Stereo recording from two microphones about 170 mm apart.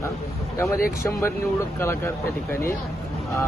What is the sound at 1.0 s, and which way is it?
Speech, 15° left (ahead or behind).